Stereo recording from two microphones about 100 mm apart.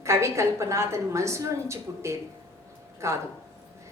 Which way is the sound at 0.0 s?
30° right (ahead or behind).